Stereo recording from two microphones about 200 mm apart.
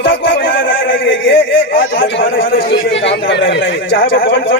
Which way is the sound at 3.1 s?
60° left (ahead or behind).